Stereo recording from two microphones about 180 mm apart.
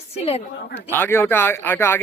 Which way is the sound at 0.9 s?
10° left (ahead or behind).